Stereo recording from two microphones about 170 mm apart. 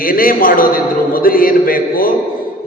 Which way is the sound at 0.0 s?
55° left (ahead or behind).